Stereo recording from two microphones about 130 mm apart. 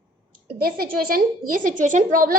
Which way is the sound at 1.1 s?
90° right.